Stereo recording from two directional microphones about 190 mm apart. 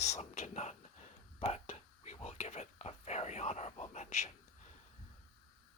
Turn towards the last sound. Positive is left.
turn(degrees=40)  # may be behind; listen again after turning